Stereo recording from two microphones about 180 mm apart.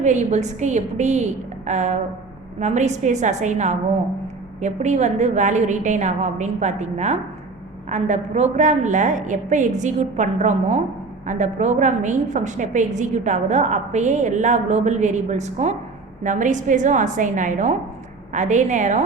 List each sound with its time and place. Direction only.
0.0 s a woman's voice: 40° right (ahead or behind)